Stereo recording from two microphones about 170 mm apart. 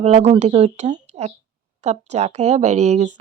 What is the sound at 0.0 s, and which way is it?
Speech, 40° right (ahead or behind).